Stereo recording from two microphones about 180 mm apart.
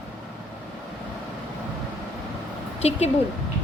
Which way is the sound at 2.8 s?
35° left (ahead or behind).